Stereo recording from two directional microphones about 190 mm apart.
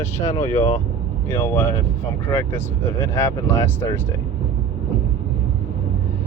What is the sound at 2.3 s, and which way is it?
Speech, 10° left (ahead or behind).